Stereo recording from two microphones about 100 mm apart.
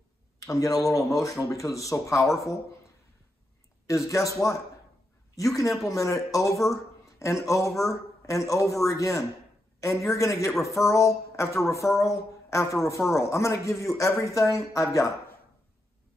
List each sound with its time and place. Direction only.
0.4 s speech: 35° left (ahead or behind)
3.8 s speech: 30° left (ahead or behind)